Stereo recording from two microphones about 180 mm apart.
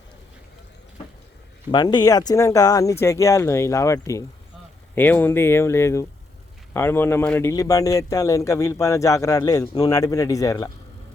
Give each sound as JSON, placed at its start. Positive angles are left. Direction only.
{"t": 1.7, "sound": "speech", "side_deg": 25}